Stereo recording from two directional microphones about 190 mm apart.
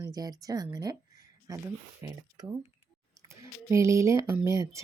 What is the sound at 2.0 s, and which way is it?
Speech, 15° right (ahead or behind).